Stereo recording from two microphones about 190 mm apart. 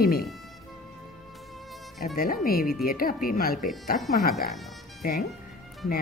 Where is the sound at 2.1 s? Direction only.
50° left (ahead or behind).